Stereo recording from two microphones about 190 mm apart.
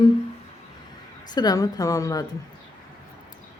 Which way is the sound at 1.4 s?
20° left (ahead or behind).